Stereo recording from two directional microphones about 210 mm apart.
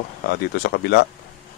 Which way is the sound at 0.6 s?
50° left (ahead or behind).